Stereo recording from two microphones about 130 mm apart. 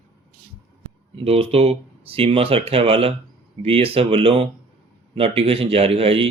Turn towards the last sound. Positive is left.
turn(degrees=-45)  # may be behind; listen again after turning